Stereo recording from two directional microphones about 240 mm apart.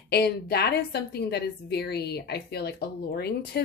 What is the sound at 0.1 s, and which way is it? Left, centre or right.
A woman's voice, left.